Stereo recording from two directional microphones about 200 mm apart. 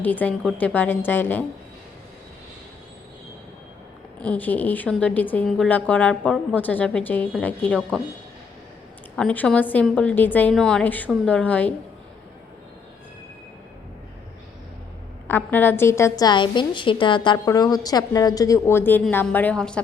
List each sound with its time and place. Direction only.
0.0 s a woman's voice: 10° left (ahead or behind)
4.2 s a woman's voice: 5° left (ahead or behind)
9.1 s a woman's voice: 5° left (ahead or behind)
15.3 s a woman's voice: 10° left (ahead or behind)